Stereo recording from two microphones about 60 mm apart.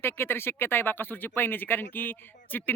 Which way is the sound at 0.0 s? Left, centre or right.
Left.